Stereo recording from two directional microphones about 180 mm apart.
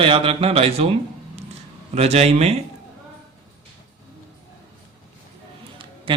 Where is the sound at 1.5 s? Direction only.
35° right (ahead or behind).